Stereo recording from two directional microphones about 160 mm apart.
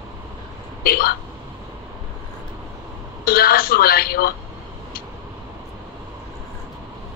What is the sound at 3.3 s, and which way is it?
A woman's voice, 70° left (ahead or behind).